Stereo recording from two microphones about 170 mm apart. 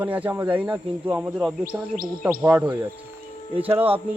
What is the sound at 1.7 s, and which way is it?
Speech, 55° right (ahead or behind).